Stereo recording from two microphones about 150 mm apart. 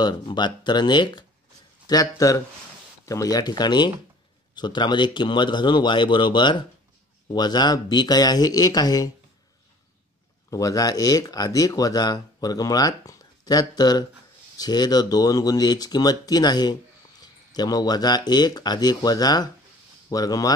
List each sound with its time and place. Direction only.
0.0 s speech: 30° left (ahead or behind)
10.5 s speech: 25° left (ahead or behind)